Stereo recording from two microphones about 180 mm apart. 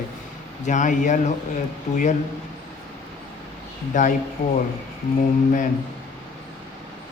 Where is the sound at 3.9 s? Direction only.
45° left (ahead or behind).